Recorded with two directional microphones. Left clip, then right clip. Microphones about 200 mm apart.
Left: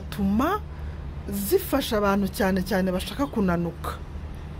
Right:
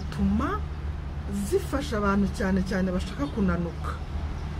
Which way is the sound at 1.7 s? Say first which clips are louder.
Left 4 dB; 45° left (ahead or behind).